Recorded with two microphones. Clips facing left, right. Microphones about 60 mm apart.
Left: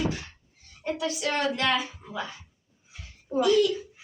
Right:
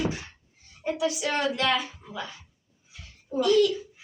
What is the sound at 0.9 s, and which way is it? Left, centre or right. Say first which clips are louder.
A woman's voice: right 2 dB; centre.